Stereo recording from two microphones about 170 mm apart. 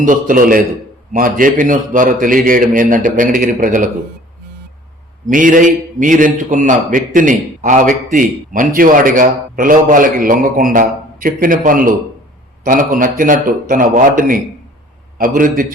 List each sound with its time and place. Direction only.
0.0 s a man's voice: 50° right (ahead or behind)
5.3 s a man's voice: 50° right (ahead or behind)